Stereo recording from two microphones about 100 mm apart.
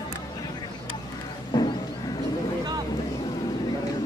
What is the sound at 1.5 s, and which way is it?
Music, 45° left (ahead or behind).